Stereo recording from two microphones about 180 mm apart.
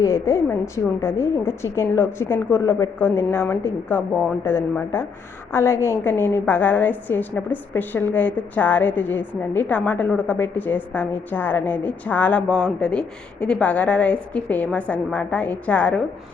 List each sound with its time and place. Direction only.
0.0 s a woman's voice: 15° left (ahead or behind)